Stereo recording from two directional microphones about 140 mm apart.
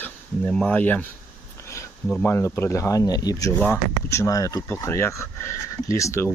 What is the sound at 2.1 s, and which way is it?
Speech, 15° left (ahead or behind).